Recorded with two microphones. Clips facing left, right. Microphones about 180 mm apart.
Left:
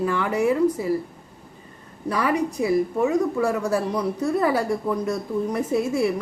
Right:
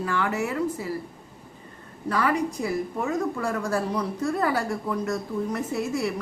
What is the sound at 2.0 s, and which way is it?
A woman's voice, 15° left (ahead or behind).